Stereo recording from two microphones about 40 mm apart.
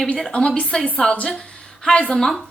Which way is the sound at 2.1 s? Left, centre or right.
Centre.